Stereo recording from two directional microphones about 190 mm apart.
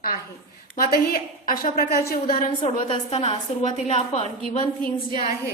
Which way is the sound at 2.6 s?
25° left (ahead or behind).